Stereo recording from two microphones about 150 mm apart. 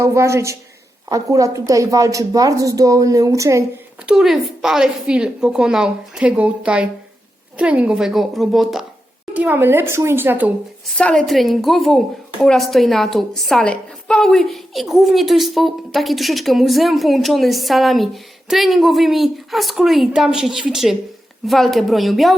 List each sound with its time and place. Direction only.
0.0 s a woman's voice: 20° right (ahead or behind)
4.0 s a woman's voice: 5° right (ahead or behind)
9.3 s a woman's voice: 10° right (ahead or behind)
10.8 s a woman's voice: 5° left (ahead or behind)